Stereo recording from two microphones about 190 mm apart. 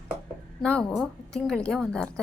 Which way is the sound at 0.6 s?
5° left (ahead or behind).